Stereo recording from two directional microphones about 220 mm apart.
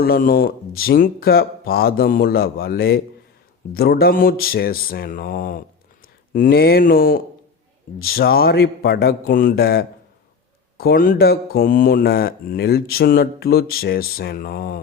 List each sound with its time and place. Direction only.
0.0 s speech: 40° left (ahead or behind)